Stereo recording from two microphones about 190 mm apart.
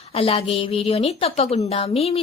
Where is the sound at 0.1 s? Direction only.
30° left (ahead or behind).